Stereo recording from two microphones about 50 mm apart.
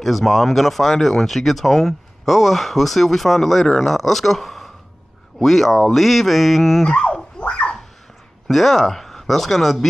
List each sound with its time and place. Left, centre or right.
0.0 s speech: centre
6.9 s dog: centre
7.4 s a sound: centre
8.5 s speech: centre